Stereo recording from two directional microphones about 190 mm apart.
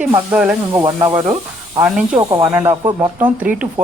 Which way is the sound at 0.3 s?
5° right (ahead or behind).